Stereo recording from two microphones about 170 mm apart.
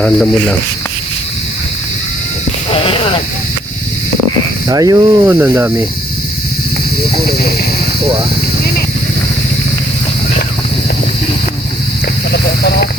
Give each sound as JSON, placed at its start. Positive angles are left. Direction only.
{"t": 0.0, "sound": "speech", "side_deg": 5}
{"t": 2.6, "sound": "speech", "side_deg": 35}
{"t": 4.7, "sound": "speech", "side_deg": -20}